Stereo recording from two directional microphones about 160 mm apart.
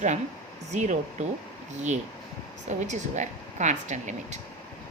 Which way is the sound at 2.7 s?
50° right (ahead or behind).